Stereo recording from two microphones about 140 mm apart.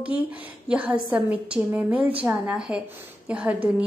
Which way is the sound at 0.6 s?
10° right (ahead or behind).